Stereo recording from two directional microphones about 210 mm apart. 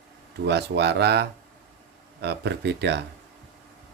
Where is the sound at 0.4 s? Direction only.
55° right (ahead or behind).